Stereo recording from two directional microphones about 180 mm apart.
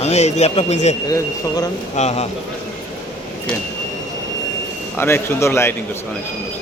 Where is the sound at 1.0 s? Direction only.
20° left (ahead or behind).